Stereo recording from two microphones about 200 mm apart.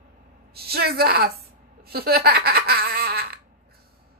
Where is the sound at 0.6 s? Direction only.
50° right (ahead or behind).